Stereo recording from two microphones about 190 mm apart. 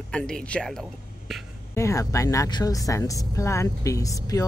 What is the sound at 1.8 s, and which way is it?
Speech, 15° left (ahead or behind).